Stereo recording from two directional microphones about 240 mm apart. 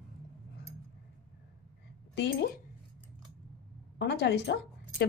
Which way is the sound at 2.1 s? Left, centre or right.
Left.